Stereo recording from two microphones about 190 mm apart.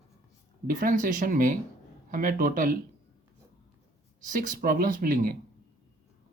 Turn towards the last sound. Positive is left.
turn(degrees=-45)  # may be behind; listen again after turning